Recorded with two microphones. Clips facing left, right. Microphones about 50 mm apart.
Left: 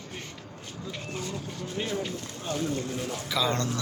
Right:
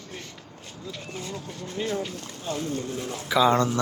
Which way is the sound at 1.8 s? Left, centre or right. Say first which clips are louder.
Right 3 dB; left.